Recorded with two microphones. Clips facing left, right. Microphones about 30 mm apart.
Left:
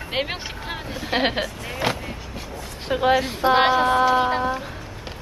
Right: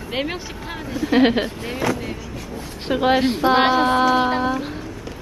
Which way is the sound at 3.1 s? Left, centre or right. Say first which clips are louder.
Right 2 dB; right.